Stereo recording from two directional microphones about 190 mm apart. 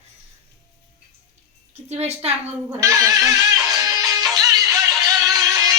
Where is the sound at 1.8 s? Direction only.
35° right (ahead or behind).